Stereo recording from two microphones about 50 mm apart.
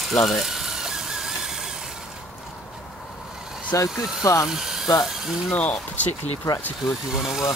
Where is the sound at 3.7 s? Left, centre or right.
Left.